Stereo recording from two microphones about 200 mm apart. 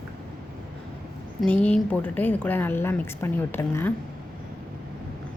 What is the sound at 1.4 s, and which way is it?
A woman's voice, 5° left (ahead or behind).